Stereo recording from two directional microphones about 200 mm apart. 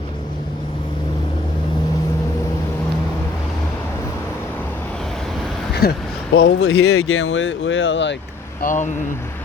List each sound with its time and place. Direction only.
5.8 s speech: 50° left (ahead or behind)
6.3 s speech: 75° left (ahead or behind)
8.6 s speech: 40° left (ahead or behind)